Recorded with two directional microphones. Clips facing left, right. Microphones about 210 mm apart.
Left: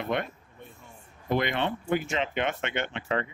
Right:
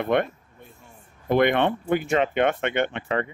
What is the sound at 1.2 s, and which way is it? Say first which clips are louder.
Speech: right 7 dB; 55° right (ahead or behind).